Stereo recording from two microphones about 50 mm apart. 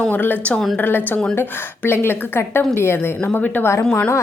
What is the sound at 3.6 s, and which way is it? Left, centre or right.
Speech, left.